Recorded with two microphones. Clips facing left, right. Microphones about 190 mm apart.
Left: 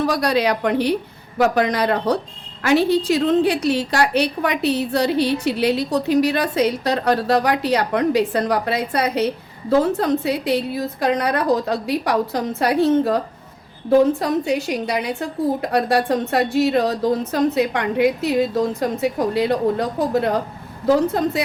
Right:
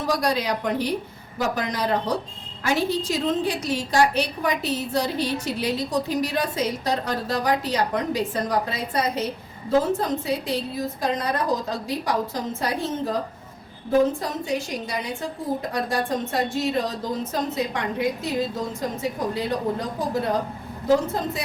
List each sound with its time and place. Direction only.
0.0 s a woman's voice: 70° left (ahead or behind)